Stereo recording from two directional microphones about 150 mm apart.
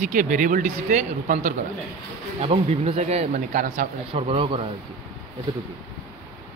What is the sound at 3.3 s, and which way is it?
Speech, 60° right (ahead or behind).